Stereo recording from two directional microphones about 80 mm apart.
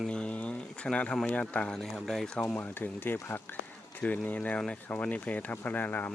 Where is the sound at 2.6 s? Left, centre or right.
Left.